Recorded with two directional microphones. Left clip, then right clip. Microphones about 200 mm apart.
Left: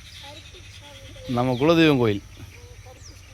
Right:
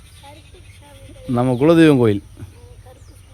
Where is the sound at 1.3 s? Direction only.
50° right (ahead or behind).